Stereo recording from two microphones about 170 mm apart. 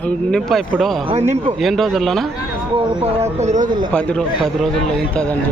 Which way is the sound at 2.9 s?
40° right (ahead or behind).